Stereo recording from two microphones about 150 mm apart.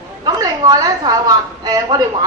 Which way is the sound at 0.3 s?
25° right (ahead or behind).